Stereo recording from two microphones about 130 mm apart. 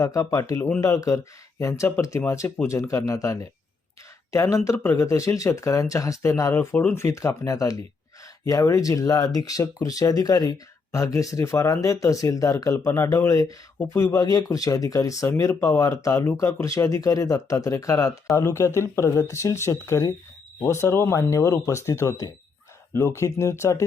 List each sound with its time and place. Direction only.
0.0 s speech: 25° left (ahead or behind)
13.7 s speech: 10° left (ahead or behind)
14.1 s speech: 30° left (ahead or behind)